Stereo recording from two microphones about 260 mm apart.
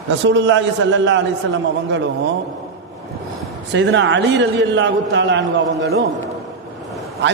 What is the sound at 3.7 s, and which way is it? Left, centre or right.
A man's voice, right.